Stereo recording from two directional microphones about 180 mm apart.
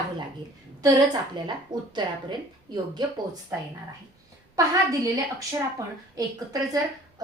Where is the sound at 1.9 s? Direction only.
25° right (ahead or behind).